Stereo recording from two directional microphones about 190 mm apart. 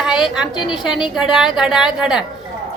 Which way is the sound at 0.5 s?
25° left (ahead or behind).